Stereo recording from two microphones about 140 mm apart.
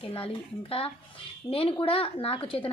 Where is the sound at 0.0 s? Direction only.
40° left (ahead or behind).